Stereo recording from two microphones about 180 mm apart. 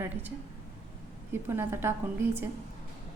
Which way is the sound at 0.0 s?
10° right (ahead or behind).